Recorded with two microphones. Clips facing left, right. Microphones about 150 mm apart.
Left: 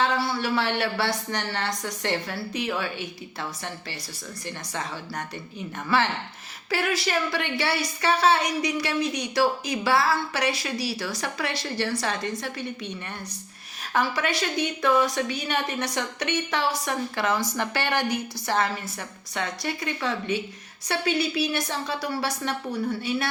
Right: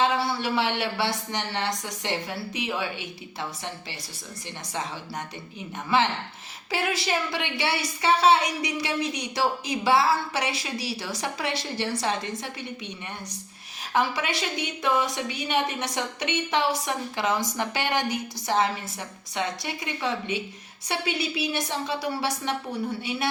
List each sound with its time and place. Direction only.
0.0 s a woman's voice: 20° right (ahead or behind)
4.7 s a woman's voice: 20° right (ahead or behind)
6.7 s a woman's voice: 20° right (ahead or behind)
13.9 s a woman's voice: 20° right (ahead or behind)